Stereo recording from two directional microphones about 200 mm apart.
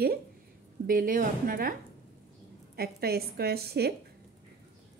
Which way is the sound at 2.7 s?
50° right (ahead or behind).